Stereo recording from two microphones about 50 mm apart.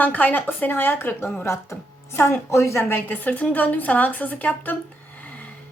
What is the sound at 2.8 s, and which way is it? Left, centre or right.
A woman's voice, left.